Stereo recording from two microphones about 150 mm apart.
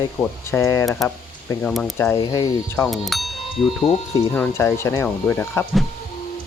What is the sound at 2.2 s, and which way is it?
Speech, 25° left (ahead or behind).